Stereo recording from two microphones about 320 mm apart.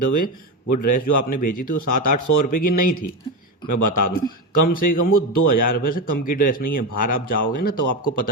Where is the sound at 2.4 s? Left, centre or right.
Left.